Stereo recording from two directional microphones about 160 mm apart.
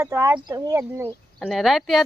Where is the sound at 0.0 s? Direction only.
15° right (ahead or behind).